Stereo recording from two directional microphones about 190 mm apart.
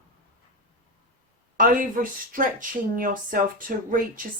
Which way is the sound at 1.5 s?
45° right (ahead or behind).